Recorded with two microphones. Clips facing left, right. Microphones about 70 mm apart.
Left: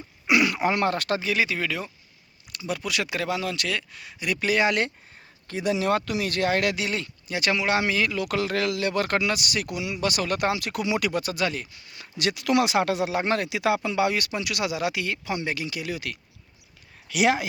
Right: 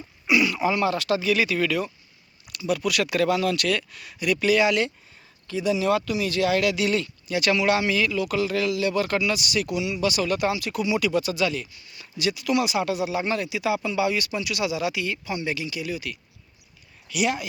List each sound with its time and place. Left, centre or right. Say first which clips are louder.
0.3 s speech: even; left
1.2 s speech: right 3 dB; left
5.5 s speech: right 1 dB; left
6.7 s speech: right 5 dB; left
7.8 s speech: right 1 dB; left
17.1 s speech: left 3 dB; left